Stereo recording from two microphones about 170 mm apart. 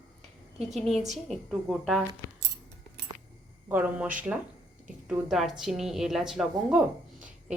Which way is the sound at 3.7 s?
10° right (ahead or behind).